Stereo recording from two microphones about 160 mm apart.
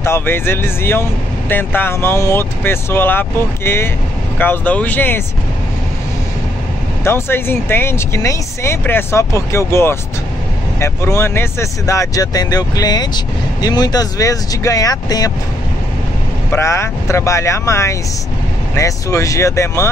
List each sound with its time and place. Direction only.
0.0 s speech: 15° left (ahead or behind)
7.1 s speech: 15° left (ahead or behind)
16.5 s speech: 15° left (ahead or behind)